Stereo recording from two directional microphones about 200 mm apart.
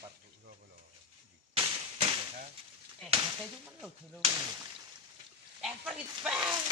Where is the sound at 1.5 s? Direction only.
25° right (ahead or behind).